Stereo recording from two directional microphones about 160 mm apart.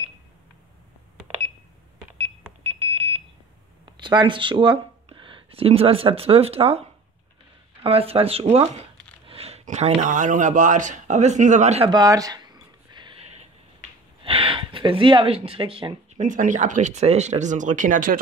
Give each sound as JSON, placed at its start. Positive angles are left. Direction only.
{"t": 2.6, "sound": "alarm", "side_deg": -35}
{"t": 3.8, "sound": "speech", "side_deg": -30}
{"t": 11.9, "sound": "a sound", "side_deg": -20}
{"t": 14.2, "sound": "speech", "side_deg": -35}
{"t": 16.2, "sound": "speech", "side_deg": -55}